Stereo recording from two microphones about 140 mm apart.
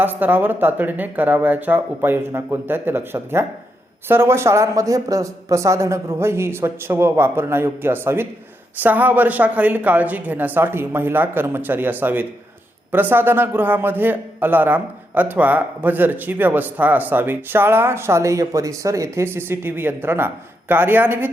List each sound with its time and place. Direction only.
0.0 s a man's voice: 15° right (ahead or behind)